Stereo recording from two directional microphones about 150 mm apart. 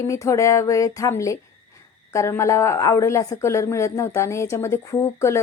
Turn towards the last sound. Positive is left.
turn(degrees=20)  # may be behind; listen again after turning